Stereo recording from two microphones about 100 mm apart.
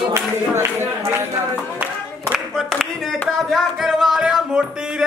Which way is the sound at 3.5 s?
Centre (ahead or behind).